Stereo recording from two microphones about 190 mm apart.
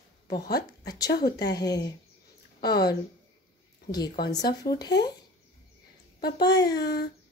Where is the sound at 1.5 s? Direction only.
20° left (ahead or behind).